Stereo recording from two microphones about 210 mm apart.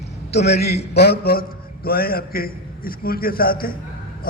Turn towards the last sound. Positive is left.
turn(degrees=45)  # may be behind; listen again after turning